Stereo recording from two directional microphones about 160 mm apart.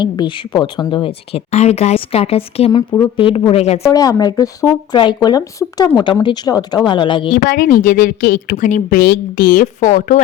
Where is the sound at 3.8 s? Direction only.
20° left (ahead or behind).